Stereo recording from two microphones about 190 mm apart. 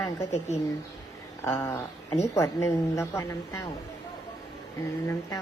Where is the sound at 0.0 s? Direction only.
15° left (ahead or behind).